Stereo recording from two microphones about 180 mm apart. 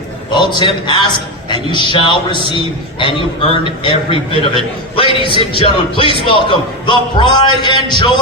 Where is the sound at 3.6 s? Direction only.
30° left (ahead or behind).